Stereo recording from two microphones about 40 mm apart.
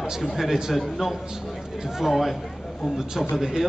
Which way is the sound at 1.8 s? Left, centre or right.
Centre.